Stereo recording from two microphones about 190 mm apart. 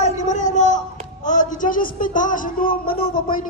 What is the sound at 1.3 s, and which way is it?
Speech, 40° left (ahead or behind).